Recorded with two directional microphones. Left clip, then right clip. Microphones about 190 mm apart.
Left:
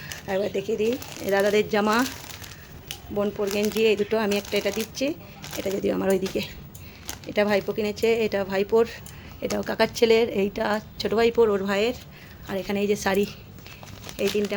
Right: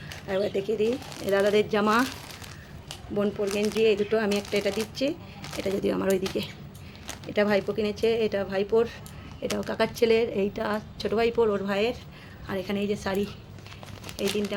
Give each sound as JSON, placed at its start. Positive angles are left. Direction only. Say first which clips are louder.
{"t": 0.0, "sound": "speech", "louder": "left 1 dB", "side_deg": 20}
{"t": 3.2, "sound": "a woman's voice", "louder": "left 2 dB", "side_deg": 15}
{"t": 12.8, "sound": "a woman's voice", "louder": "left 8 dB", "side_deg": 35}